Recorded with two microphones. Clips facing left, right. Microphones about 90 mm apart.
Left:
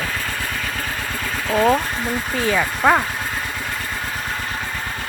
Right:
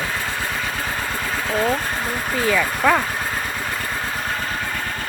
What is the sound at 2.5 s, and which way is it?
Speech, 25° left (ahead or behind).